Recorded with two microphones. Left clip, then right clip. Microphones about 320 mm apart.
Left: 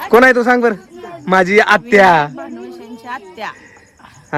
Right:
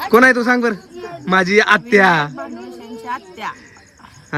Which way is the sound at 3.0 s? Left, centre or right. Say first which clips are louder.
Even; centre.